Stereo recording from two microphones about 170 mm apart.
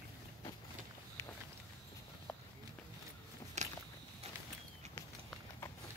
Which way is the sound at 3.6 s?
45° right (ahead or behind).